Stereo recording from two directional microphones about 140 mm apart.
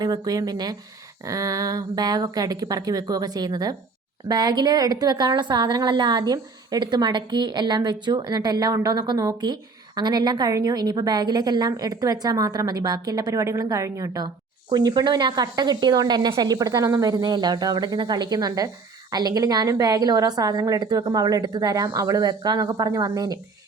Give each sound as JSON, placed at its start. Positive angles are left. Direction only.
{"t": 0.0, "sound": "a woman's voice", "side_deg": -30}